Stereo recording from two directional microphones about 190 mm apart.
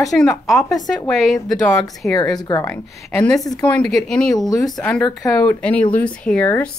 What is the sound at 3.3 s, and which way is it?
Speech, 20° left (ahead or behind).